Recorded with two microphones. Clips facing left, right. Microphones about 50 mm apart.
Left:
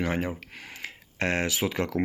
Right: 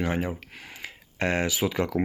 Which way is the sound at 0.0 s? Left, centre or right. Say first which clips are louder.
Right 1 dB; left.